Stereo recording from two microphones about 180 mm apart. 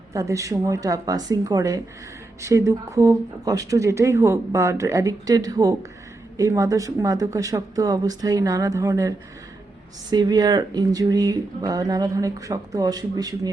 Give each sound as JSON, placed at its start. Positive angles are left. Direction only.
{"t": 0.1, "sound": "speech", "side_deg": -15}